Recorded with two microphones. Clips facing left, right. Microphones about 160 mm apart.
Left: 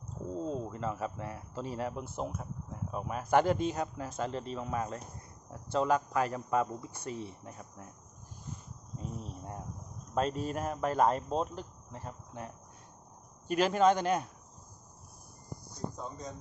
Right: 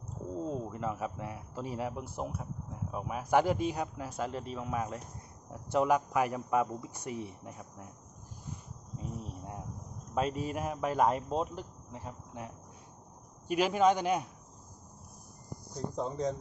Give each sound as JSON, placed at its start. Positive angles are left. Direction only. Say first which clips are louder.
{"t": 0.3, "sound": "speech", "louder": "even", "side_deg": -15}
{"t": 9.0, "sound": "speech", "louder": "even", "side_deg": -10}
{"t": 13.5, "sound": "speech", "louder": "even", "side_deg": -10}
{"t": 16.0, "sound": "speech", "louder": "right 9 dB", "side_deg": -80}